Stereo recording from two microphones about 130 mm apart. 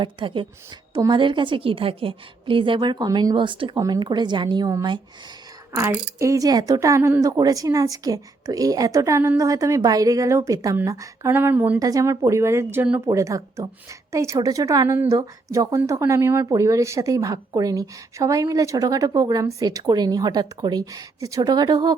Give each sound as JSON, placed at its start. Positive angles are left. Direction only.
{"t": 0.0, "sound": "a woman's voice", "side_deg": -40}
{"t": 3.8, "sound": "a woman's voice", "side_deg": -30}
{"t": 5.7, "sound": "speech", "side_deg": -20}
{"t": 11.8, "sound": "a woman's voice", "side_deg": -25}